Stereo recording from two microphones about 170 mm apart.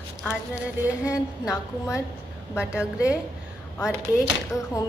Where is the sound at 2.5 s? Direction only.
5° right (ahead or behind).